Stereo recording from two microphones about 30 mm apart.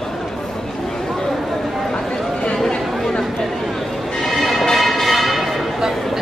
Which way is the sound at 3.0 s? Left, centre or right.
Centre.